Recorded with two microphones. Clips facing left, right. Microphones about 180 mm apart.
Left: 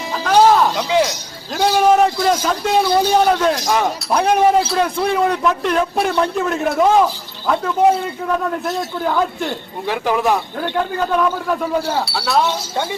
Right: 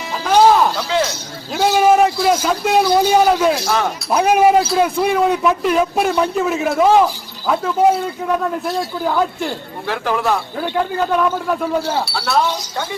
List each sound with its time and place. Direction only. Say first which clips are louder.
0.8 s speech: left 2 dB; 15° left (ahead or behind)
1.5 s a man's voice: right 1 dB; 5° right (ahead or behind)
3.6 s speech: left 1 dB; 15° left (ahead or behind)
4.1 s a man's voice: right 2 dB; 10° right (ahead or behind)
9.5 s speech: left 1 dB; 15° left (ahead or behind)
10.6 s a man's voice: right 1 dB; 5° right (ahead or behind)